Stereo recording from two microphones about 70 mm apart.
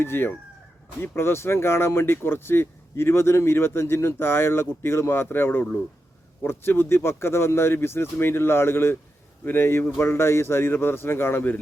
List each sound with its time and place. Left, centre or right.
0.0 s speech: left